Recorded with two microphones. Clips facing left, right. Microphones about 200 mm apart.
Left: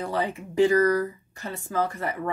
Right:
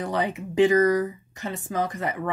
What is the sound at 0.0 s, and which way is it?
Speech, 20° right (ahead or behind).